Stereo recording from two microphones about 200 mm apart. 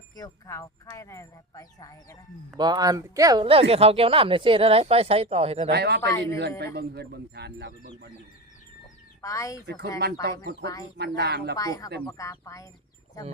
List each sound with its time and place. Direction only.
0.2 s speech: 20° left (ahead or behind)
2.6 s speech: 20° right (ahead or behind)
5.7 s speech: 55° right (ahead or behind)
6.0 s speech: 15° left (ahead or behind)
6.7 s speech: 55° right (ahead or behind)
9.2 s speech: 15° left (ahead or behind)
10.0 s speech: 55° right (ahead or behind)
11.5 s speech: 15° left (ahead or behind)